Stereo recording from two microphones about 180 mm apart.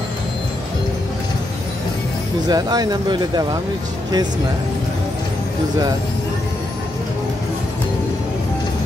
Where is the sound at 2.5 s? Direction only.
20° right (ahead or behind).